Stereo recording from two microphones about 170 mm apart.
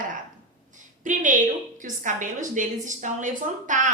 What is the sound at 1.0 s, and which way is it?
A woman's voice, 50° right (ahead or behind).